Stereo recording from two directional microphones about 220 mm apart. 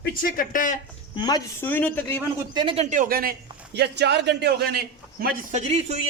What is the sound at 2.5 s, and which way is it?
A man's voice, 25° right (ahead or behind).